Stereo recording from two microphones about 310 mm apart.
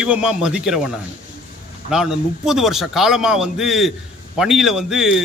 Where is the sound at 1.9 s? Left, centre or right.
Centre.